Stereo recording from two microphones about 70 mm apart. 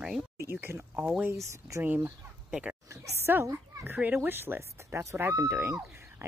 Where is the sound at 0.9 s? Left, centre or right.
Right.